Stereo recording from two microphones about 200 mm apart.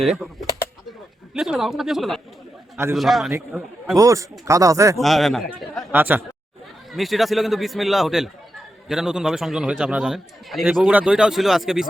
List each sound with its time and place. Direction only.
1.3 s a man's voice: centre (ahead or behind)
3.3 s speech: 10° right (ahead or behind)
4.9 s a man's voice: centre (ahead or behind)
5.9 s a man's voice: 10° right (ahead or behind)